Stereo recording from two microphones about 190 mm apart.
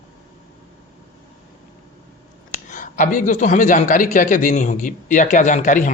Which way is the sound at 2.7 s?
40° left (ahead or behind).